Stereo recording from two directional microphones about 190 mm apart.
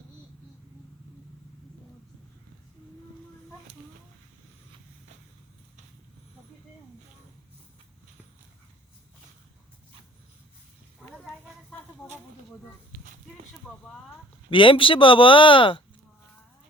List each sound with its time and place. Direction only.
12.0 s snake: 10° left (ahead or behind)
14.5 s speech: 25° left (ahead or behind)